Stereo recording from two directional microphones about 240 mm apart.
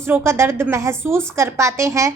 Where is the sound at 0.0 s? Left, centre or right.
Centre.